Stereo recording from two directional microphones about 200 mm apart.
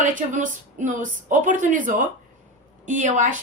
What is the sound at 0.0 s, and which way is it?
A woman's voice, 40° right (ahead or behind).